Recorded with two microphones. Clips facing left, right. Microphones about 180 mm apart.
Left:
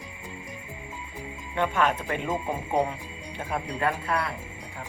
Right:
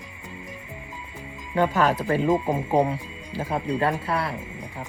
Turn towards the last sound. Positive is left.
turn(degrees=-30)  # may be behind; listen again after turning